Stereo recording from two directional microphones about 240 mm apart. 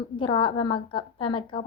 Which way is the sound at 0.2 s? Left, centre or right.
Centre.